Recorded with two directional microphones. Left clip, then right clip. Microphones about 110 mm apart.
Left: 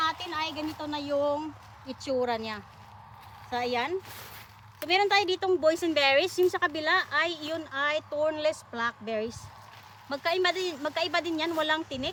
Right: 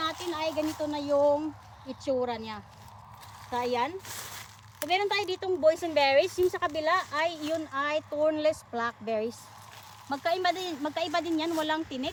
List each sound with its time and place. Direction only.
0.0 s a sound: 15° left (ahead or behind)
1.2 s speech: 15° left (ahead or behind); by 9.3 s centre (ahead or behind)
10.1 s speech: 15° left (ahead or behind)